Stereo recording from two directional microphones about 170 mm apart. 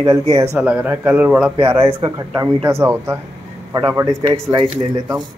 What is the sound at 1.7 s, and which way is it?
A man's voice, 20° right (ahead or behind).